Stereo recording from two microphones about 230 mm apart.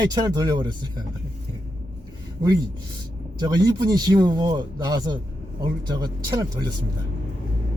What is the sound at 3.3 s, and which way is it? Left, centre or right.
Speech, centre.